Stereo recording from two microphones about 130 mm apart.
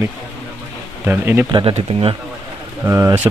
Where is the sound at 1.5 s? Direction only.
40° right (ahead or behind).